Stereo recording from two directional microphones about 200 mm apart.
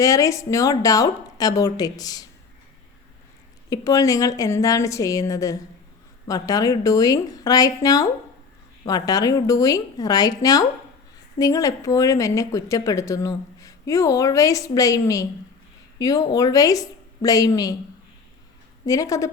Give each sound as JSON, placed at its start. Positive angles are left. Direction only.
{"t": 0.0, "sound": "speech", "side_deg": 15}
{"t": 3.7, "sound": "speech", "side_deg": 15}
{"t": 18.9, "sound": "speech", "side_deg": 15}